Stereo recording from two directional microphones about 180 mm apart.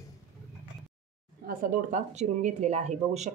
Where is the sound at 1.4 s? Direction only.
45° right (ahead or behind).